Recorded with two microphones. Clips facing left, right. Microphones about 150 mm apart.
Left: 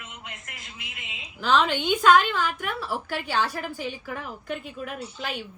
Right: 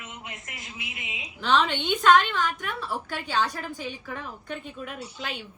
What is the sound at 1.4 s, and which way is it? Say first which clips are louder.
A woman's voice: left 1 dB; 5° left (ahead or behind).